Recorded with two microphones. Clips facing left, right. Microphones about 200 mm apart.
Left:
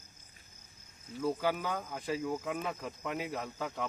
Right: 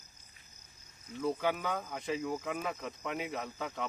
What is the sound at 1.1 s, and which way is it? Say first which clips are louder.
Speech: even; 5° left (ahead or behind).